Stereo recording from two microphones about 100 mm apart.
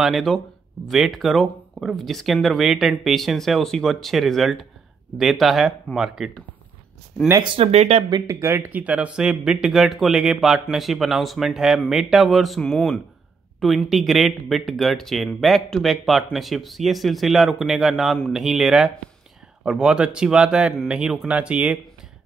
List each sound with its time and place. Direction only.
0.0 s speech: centre (ahead or behind)
7.4 s speech: 75° right (ahead or behind)
8.3 s speech: 25° right (ahead or behind)